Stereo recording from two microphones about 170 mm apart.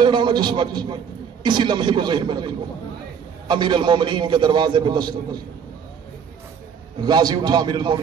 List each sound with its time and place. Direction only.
0.0 s a man's voice: 25° right (ahead or behind)
7.0 s a man's voice: 25° right (ahead or behind)